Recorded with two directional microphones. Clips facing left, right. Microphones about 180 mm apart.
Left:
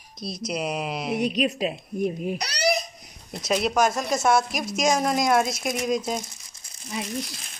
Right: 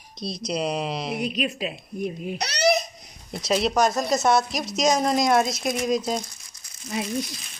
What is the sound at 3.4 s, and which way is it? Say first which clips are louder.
Speech: right 1 dB; 5° left (ahead or behind).